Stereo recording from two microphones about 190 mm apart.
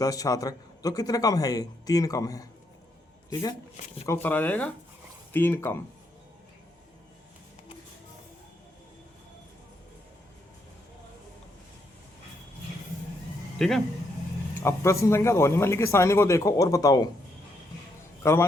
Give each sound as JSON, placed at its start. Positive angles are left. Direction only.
{"t": 0.0, "sound": "a man's voice", "side_deg": 20}
{"t": 4.0, "sound": "speech", "side_deg": 10}
{"t": 13.6, "sound": "speech", "side_deg": 0}
{"t": 14.6, "sound": "speech", "side_deg": 15}
{"t": 18.2, "sound": "a man's voice", "side_deg": 15}